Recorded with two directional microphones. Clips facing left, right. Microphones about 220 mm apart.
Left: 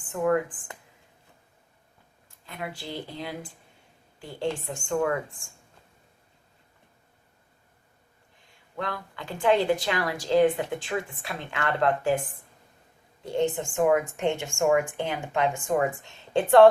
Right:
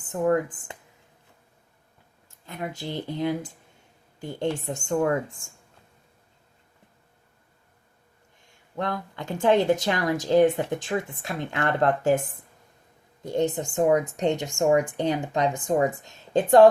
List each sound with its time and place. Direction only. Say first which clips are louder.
0.1 s speech: right 2 dB; 40° right (ahead or behind)
2.5 s speech: right 3 dB; 40° right (ahead or behind)
8.8 s speech: right 4 dB; 45° right (ahead or behind)
13.2 s speech: right 1 dB; 40° right (ahead or behind)